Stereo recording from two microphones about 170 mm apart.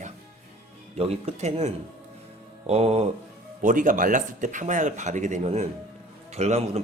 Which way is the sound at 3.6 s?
50° right (ahead or behind).